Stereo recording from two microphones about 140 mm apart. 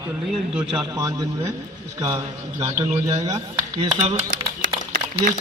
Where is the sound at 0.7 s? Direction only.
30° right (ahead or behind).